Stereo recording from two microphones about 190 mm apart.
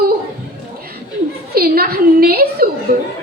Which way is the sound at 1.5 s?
55° right (ahead or behind).